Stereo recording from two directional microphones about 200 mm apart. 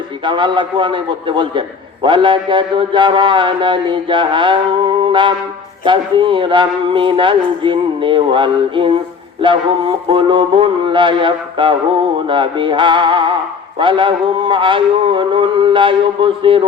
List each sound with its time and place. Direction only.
0.3 s a man's voice: 25° right (ahead or behind)